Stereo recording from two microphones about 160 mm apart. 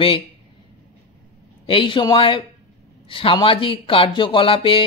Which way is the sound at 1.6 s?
35° left (ahead or behind).